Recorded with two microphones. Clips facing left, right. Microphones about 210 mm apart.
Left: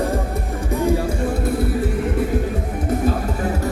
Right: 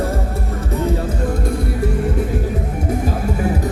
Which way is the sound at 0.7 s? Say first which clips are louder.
Left 2 dB; 15° left (ahead or behind).